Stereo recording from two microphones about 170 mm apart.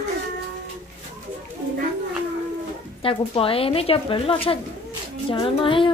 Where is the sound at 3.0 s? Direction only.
30° left (ahead or behind).